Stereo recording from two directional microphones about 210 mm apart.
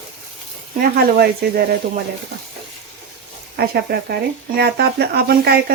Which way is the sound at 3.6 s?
45° right (ahead or behind).